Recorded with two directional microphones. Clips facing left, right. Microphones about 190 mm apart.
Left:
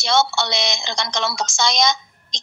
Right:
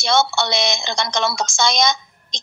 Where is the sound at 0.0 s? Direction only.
55° right (ahead or behind).